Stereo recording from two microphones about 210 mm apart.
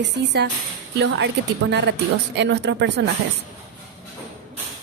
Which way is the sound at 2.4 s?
55° right (ahead or behind).